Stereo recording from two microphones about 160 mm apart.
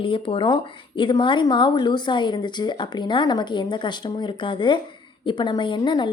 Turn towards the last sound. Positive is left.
turn(degrees=30)  # may be behind; listen again after turning